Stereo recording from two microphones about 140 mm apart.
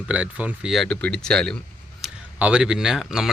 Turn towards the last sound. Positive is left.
turn(degrees=-5)  # may be behind; listen again after turning